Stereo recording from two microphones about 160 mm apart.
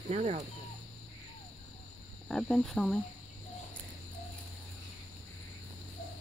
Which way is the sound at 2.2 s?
5° left (ahead or behind).